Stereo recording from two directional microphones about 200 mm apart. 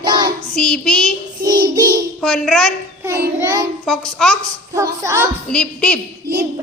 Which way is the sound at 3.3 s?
10° right (ahead or behind).